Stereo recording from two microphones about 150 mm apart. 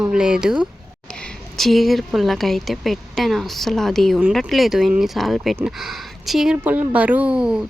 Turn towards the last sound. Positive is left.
turn(degrees=-5)  # may be behind; listen again after turning